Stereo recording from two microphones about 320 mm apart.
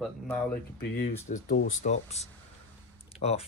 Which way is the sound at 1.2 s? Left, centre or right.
Left.